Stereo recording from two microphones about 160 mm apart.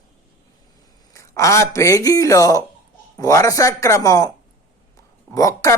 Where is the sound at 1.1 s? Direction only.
20° left (ahead or behind).